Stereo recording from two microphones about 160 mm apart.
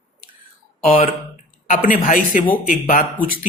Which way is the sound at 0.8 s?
60° left (ahead or behind).